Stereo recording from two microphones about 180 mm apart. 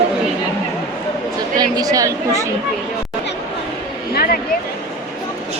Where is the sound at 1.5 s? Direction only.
20° right (ahead or behind).